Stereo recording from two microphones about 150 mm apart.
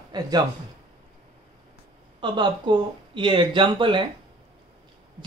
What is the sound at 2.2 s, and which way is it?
Speech, 30° right (ahead or behind).